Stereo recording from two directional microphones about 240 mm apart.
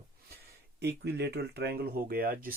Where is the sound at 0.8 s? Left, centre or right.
Right.